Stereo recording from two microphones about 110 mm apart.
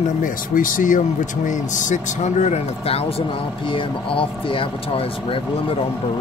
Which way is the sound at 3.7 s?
50° left (ahead or behind).